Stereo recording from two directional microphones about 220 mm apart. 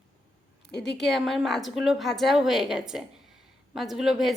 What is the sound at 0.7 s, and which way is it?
Speech, 50° left (ahead or behind).